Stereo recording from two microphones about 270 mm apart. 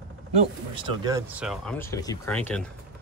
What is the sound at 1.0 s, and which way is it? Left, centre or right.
Speech, centre.